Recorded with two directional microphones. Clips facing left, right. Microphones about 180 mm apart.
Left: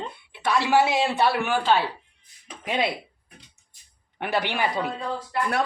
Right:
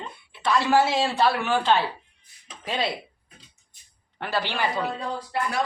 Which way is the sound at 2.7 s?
15° left (ahead or behind).